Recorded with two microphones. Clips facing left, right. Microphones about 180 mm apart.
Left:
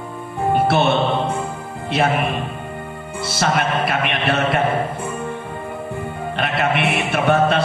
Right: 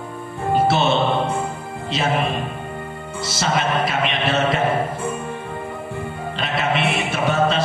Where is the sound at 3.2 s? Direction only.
55° left (ahead or behind).